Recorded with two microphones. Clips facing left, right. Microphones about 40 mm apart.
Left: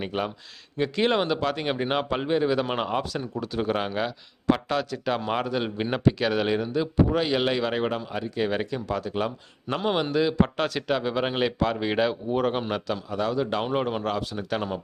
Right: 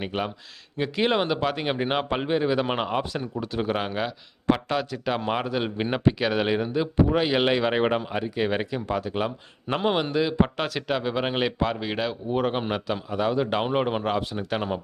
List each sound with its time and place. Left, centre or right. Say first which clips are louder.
0.0 s speech: even; centre
11.8 s speech: left 4 dB; centre
12.3 s speech: even; centre